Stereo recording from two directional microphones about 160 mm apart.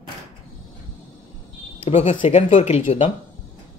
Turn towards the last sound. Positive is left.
turn(degrees=40)  # may be behind; listen again after turning